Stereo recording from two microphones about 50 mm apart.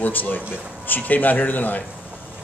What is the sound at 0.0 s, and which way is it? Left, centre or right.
A man's voice, left.